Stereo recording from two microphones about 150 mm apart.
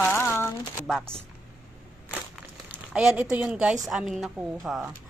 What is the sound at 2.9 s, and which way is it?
Speech, 5° right (ahead or behind).